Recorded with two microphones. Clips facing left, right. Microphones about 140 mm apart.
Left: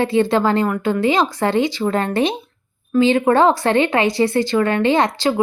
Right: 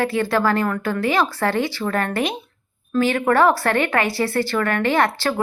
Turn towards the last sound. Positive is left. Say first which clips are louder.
# left 3 dB
turn(degrees=20)  # may be behind; listen again after turning